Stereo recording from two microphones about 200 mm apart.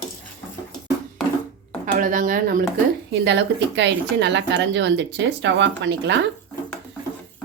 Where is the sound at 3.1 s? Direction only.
60° right (ahead or behind).